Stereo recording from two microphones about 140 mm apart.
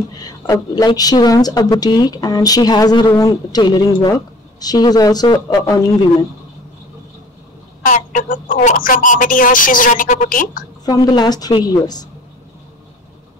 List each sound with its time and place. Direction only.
0.1 s speech: 25° left (ahead or behind)
7.8 s speech: 70° left (ahead or behind)
10.9 s speech: 30° left (ahead or behind)